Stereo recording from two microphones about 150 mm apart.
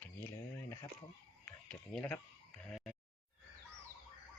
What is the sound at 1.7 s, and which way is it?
Speech, 5° left (ahead or behind).